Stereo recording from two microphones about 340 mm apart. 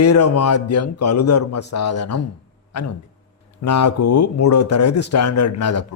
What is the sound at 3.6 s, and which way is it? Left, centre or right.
A man's voice, left.